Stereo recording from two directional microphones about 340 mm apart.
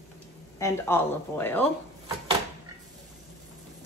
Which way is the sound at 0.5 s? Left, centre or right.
Centre.